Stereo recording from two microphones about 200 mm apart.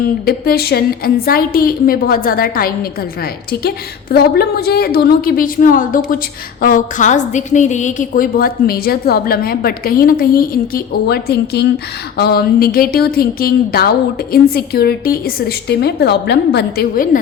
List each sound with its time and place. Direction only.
0.3 s a woman's voice: 50° left (ahead or behind)
4.1 s a woman's voice: 50° left (ahead or behind)